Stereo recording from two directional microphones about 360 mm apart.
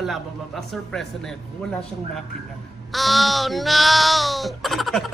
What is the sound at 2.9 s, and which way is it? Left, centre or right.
Speech, centre.